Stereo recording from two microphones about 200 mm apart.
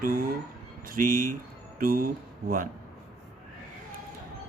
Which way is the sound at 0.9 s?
45° right (ahead or behind).